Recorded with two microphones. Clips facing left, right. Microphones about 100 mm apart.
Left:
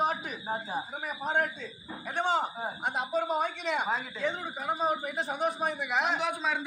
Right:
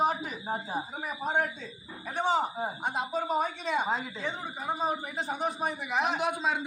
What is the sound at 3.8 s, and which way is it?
Speech, 30° right (ahead or behind).